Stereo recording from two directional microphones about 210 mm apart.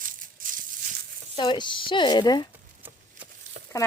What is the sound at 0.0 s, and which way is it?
Crushing, 40° right (ahead or behind).